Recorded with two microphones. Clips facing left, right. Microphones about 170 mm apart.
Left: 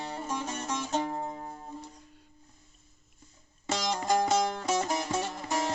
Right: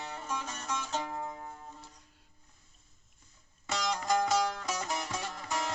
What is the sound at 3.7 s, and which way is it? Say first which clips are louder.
Music: left 3 dB; 25° left (ahead or behind).